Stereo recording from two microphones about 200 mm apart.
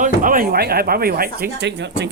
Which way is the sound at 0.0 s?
40° right (ahead or behind).